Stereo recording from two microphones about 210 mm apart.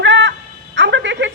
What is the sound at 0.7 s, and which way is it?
Music, 60° right (ahead or behind).